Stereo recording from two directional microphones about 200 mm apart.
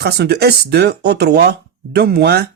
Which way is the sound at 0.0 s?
55° right (ahead or behind).